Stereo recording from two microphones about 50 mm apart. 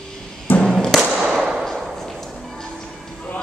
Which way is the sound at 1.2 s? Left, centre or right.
Centre.